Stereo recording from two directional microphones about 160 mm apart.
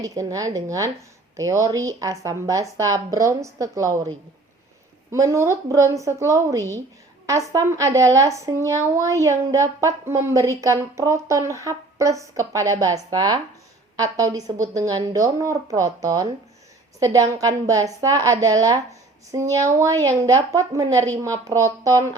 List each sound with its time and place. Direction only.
0.0 s speech: 20° right (ahead or behind)
5.1 s speech: 20° right (ahead or behind)